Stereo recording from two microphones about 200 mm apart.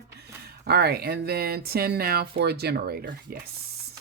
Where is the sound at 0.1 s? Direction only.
55° right (ahead or behind).